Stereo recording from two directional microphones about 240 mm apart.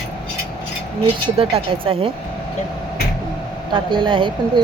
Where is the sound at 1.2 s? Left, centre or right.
Right.